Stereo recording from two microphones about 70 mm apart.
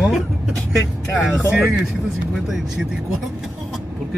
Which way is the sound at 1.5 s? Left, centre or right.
Centre.